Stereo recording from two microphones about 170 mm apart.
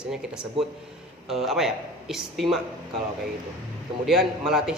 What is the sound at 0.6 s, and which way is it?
Speech, 35° right (ahead or behind).